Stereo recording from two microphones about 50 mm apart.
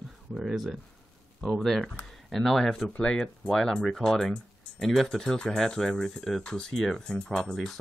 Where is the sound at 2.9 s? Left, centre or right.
Centre.